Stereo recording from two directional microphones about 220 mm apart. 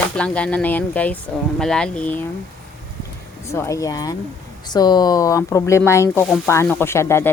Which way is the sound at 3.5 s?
15° left (ahead or behind).